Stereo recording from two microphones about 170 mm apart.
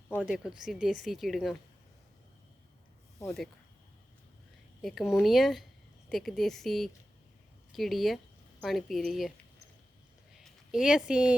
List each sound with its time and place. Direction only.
0.2 s speech: 5° right (ahead or behind)
3.2 s speech: centre (ahead or behind)
4.8 s speech: centre (ahead or behind)
10.3 s speech: 5° right (ahead or behind)